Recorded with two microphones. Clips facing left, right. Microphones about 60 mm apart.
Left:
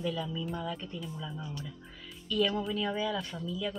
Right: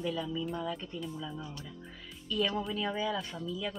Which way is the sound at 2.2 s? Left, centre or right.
Centre.